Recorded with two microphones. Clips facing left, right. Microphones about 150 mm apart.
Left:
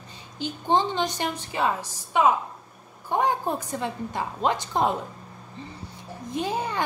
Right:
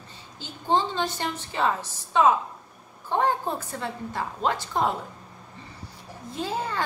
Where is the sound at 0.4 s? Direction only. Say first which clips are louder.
Left 2 dB; 15° left (ahead or behind).